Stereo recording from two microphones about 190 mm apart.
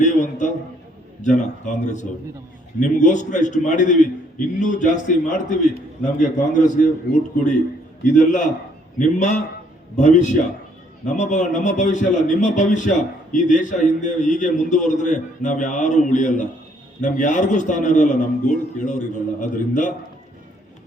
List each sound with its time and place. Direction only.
0.0 s a man's voice: 40° left (ahead or behind)
8.0 s a man's voice: 40° left (ahead or behind)